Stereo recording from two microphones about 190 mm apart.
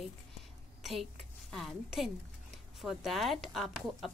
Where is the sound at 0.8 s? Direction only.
Centre (ahead or behind).